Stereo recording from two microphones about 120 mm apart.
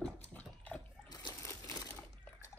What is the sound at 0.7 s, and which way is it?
Water, 35° left (ahead or behind).